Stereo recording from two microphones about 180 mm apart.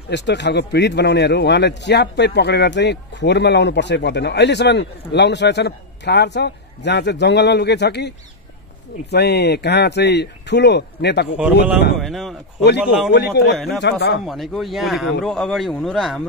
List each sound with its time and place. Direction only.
0.1 s a man's voice: 75° left (ahead or behind)
9.1 s a man's voice: 65° left (ahead or behind)
12.0 s speech: centre (ahead or behind)
13.1 s a man's voice: 70° left (ahead or behind)
14.2 s speech: centre (ahead or behind)